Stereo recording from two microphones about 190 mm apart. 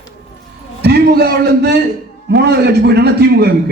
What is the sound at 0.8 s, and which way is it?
A man's voice, 55° right (ahead or behind).